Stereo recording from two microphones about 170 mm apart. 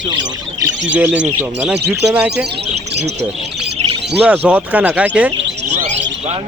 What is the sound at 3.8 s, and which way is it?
Bird, 40° right (ahead or behind).